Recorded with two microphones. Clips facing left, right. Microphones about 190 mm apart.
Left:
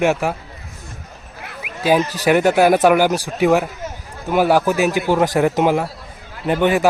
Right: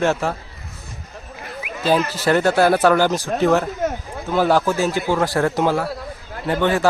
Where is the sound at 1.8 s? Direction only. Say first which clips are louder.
Left 2 dB; 15° left (ahead or behind).